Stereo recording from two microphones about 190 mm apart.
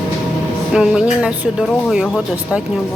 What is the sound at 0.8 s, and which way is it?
A woman's voice, 5° right (ahead or behind).